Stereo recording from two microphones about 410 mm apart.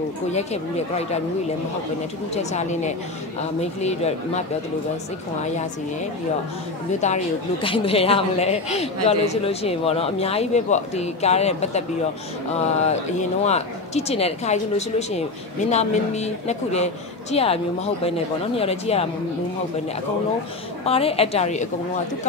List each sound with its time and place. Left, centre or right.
0.3 s a man's voice: centre
2.3 s a man's voice: centre
6.9 s a man's voice: centre
20.8 s a man's voice: centre